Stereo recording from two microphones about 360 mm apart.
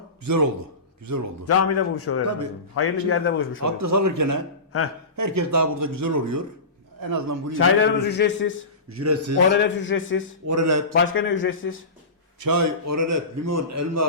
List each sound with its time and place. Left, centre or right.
1.5 s a man's voice: left
3.6 s a man's voice: right
7.6 s a man's voice: left
9.0 s a man's voice: right
9.5 s a man's voice: left
10.4 s a man's voice: right
10.9 s a man's voice: left
12.4 s a man's voice: right